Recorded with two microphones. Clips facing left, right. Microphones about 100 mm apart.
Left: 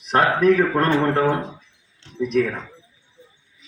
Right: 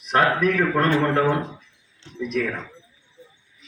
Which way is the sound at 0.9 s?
20° left (ahead or behind).